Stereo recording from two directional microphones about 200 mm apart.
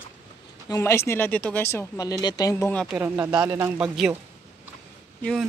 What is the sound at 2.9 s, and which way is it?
Speech, 10° right (ahead or behind).